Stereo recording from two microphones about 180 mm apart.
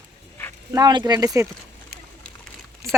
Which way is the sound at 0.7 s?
20° right (ahead or behind).